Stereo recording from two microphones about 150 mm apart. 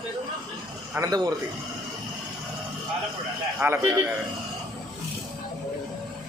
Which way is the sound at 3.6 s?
15° right (ahead or behind).